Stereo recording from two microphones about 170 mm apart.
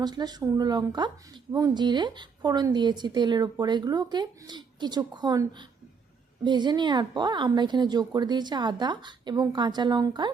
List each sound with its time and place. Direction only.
0.0 s a woman's voice: 25° right (ahead or behind)